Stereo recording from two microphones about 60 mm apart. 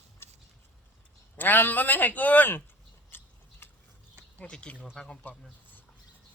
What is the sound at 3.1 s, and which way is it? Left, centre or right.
Biting, left.